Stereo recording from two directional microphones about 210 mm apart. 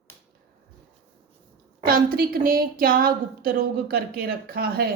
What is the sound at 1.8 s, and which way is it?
Speech, 45° right (ahead or behind).